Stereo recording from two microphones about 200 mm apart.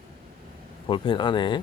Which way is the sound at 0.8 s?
25° left (ahead or behind).